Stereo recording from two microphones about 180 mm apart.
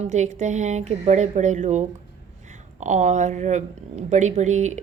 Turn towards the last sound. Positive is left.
turn(degrees=-40)  # may be behind; listen again after turning